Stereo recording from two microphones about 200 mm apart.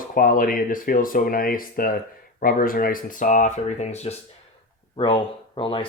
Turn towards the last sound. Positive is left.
turn(degrees=25)  # may be behind; listen again after turning